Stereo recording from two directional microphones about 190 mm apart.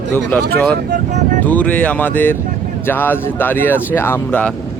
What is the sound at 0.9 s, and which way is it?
Speech, 40° right (ahead or behind).